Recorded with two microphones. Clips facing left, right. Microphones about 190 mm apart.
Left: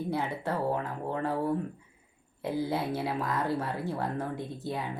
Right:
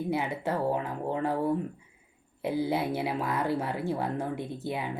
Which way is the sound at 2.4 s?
15° right (ahead or behind).